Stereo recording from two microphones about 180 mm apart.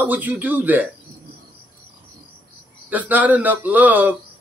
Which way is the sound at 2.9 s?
10° right (ahead or behind).